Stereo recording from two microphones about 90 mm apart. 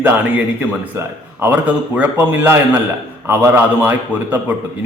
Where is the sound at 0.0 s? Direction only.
20° right (ahead or behind).